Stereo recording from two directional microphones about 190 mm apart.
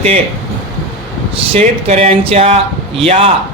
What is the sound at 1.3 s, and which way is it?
A man's voice, 30° right (ahead or behind).